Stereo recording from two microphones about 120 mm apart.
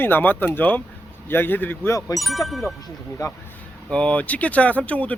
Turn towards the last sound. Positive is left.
turn(degrees=10)  # may be behind; listen again after turning